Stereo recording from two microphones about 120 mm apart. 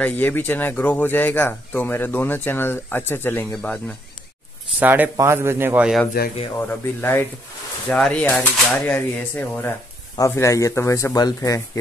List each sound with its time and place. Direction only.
0.0 s speech: 15° left (ahead or behind)
4.7 s a man's voice: 15° right (ahead or behind)
6.7 s speech: 20° left (ahead or behind)